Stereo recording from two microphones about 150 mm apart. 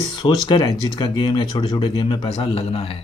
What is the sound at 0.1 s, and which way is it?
Speech, 30° left (ahead or behind).